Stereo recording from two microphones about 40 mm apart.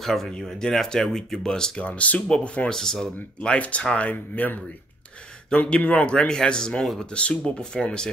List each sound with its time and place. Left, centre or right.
0.0 s speech: centre
1.8 s speech: left
2.7 s speech: centre
3.4 s speech: left
5.8 s speech: left
6.0 s a man's voice: left